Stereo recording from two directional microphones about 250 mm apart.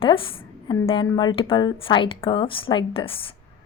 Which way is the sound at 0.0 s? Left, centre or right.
Left.